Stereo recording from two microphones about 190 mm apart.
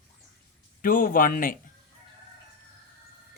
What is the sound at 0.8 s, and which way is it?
Speech, 45° left (ahead or behind).